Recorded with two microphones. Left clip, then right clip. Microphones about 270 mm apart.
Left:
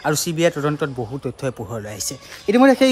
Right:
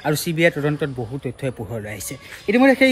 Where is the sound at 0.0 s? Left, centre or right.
Centre.